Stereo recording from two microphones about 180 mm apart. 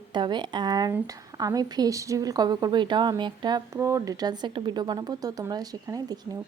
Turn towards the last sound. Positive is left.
turn(degrees=-20)  # may be behind; listen again after turning